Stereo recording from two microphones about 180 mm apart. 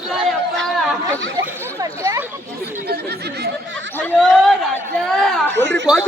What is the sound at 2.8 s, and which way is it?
Chatter, 65° right (ahead or behind).